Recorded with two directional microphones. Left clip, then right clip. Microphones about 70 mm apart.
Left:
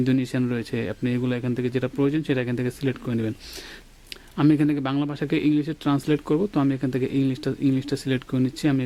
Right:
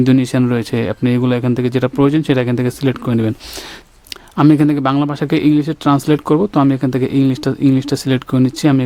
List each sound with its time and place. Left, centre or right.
0.0 s speech: right
4.4 s speech: right